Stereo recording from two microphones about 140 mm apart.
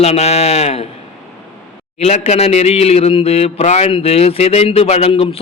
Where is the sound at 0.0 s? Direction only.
50° left (ahead or behind).